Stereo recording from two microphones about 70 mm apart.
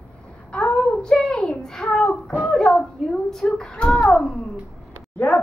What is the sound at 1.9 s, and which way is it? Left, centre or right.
Child singing, centre.